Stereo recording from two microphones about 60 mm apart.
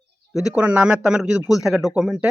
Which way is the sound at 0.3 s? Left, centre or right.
Centre.